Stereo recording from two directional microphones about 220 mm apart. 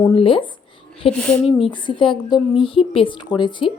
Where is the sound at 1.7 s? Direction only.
20° left (ahead or behind).